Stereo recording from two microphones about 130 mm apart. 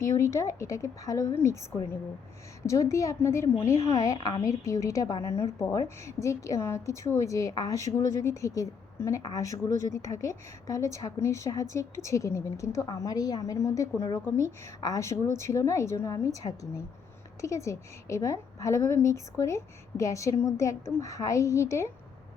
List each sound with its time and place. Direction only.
0.0 s a woman's voice: 25° left (ahead or behind)
2.6 s a woman's voice: 25° left (ahead or behind)